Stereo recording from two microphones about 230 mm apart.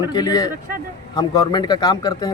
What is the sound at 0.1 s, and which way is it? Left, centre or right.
Speech, centre.